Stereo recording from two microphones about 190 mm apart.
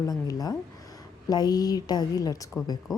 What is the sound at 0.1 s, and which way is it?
A woman's voice, 20° left (ahead or behind).